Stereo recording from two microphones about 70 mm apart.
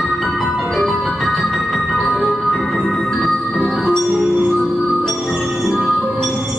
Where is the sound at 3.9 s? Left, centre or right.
Centre.